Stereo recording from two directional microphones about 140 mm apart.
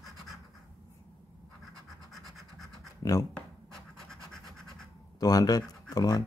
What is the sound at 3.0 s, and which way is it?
Speech, 25° left (ahead or behind).